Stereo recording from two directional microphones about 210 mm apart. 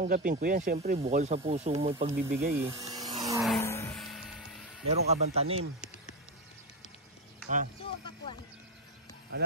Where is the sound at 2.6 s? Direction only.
15° right (ahead or behind).